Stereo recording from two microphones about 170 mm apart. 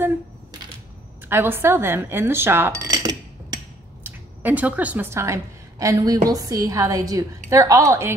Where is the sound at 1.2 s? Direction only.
15° right (ahead or behind).